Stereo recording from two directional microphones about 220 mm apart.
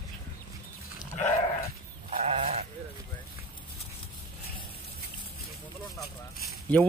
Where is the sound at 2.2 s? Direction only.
30° right (ahead or behind).